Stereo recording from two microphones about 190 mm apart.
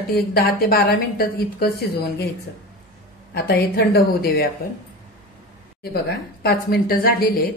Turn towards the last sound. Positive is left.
turn(degrees=50)  # may be behind; listen again after turning